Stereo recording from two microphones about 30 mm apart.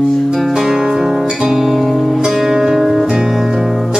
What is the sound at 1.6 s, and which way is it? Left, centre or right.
Music, centre.